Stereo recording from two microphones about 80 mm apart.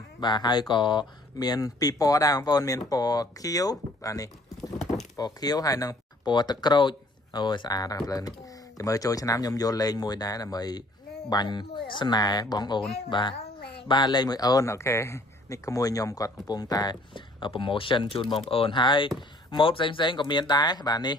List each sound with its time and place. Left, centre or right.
0.2 s speech: left
6.2 s speech: left
13.1 s a child's voice: left
14.7 s speech: left
17.1 s speech: left